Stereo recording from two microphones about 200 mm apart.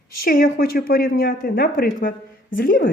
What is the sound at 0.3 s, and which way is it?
Speech, 45° left (ahead or behind).